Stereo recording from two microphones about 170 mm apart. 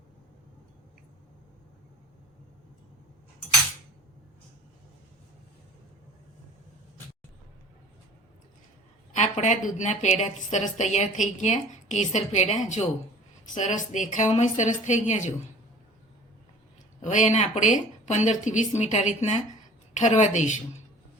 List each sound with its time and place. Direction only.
9.1 s a woman's voice: 45° left (ahead or behind)
17.0 s a woman's voice: 45° left (ahead or behind)